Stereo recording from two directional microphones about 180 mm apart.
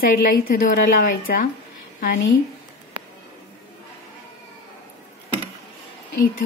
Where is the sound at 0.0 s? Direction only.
55° left (ahead or behind).